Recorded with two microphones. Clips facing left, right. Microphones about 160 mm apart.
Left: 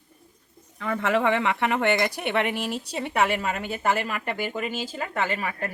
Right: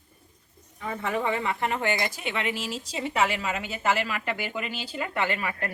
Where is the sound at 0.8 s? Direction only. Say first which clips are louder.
Left 5 dB; 80° left.